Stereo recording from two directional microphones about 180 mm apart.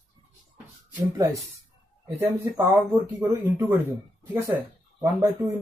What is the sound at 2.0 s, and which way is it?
Speech, 15° right (ahead or behind).